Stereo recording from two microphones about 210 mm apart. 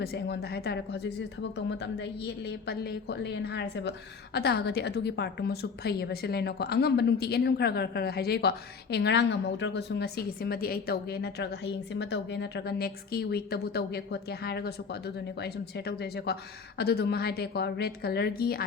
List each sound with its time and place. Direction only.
0.0 s speech: 50° left (ahead or behind)